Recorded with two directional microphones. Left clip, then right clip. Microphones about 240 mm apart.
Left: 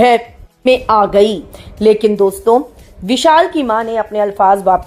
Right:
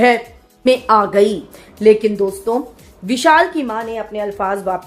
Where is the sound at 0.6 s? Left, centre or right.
Centre.